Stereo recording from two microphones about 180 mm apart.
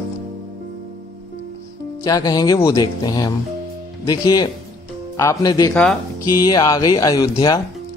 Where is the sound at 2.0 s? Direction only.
20° left (ahead or behind).